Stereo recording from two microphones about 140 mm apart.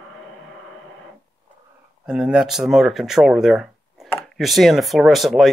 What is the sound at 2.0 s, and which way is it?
Speech, 5° right (ahead or behind).